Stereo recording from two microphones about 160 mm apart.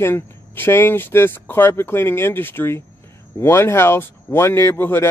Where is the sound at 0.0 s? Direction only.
15° left (ahead or behind).